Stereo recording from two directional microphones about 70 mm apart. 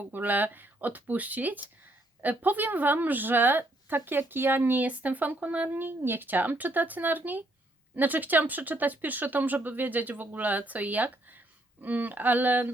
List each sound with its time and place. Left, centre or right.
0.0 s a woman's voice: right